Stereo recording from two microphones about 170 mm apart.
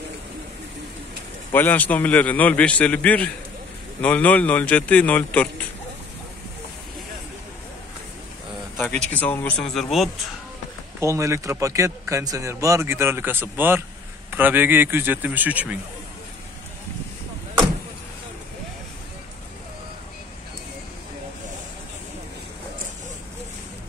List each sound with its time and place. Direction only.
1.5 s a man's voice: 10° left (ahead or behind)
9.1 s a man's voice: 10° left (ahead or behind)
11.0 s speech: 15° right (ahead or behind)